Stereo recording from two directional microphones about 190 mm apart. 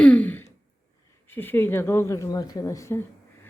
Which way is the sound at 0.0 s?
10° left (ahead or behind).